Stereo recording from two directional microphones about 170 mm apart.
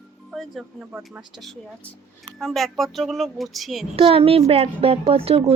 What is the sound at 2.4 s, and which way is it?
Speech, centre (ahead or behind).